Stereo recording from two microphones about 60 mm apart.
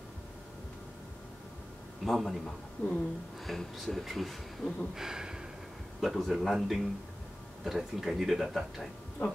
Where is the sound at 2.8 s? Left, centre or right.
Left.